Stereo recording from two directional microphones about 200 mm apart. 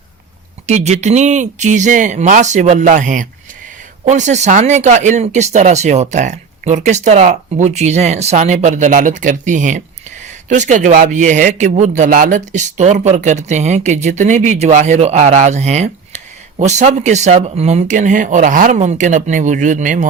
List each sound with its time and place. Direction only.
0.7 s a man's voice: 35° right (ahead or behind)